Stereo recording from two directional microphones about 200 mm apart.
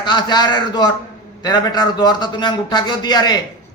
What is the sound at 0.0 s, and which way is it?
A man's voice, 20° left (ahead or behind).